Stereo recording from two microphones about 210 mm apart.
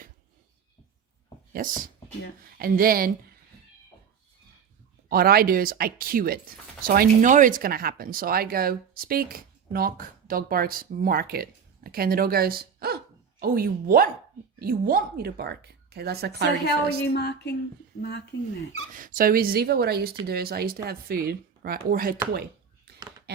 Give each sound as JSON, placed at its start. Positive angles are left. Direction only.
{"t": 2.6, "sound": "speech", "side_deg": -45}
{"t": 5.0, "sound": "speech", "side_deg": -45}
{"t": 16.6, "sound": "a woman's voice", "side_deg": 50}
{"t": 18.9, "sound": "speech", "side_deg": -40}